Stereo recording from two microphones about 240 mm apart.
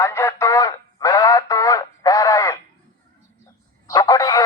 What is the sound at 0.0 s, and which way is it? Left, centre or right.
Radio, centre.